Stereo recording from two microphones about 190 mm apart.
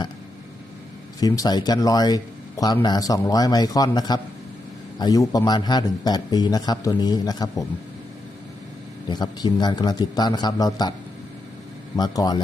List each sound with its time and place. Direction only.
1.2 s a man's voice: 20° left (ahead or behind)
9.0 s a man's voice: 20° left (ahead or behind)
11.9 s a man's voice: 20° left (ahead or behind)